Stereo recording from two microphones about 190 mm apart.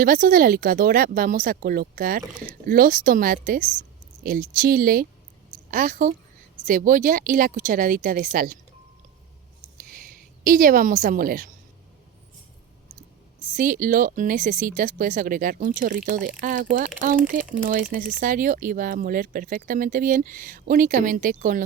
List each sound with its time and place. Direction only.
0.0 s speech: 50° right (ahead or behind)
9.7 s a sound: 50° right (ahead or behind)
13.6 s speech: 45° right (ahead or behind)